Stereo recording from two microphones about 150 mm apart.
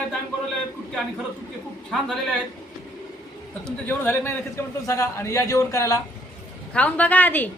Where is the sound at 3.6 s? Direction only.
10° left (ahead or behind).